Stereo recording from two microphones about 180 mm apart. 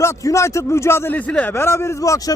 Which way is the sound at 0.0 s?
15° left (ahead or behind).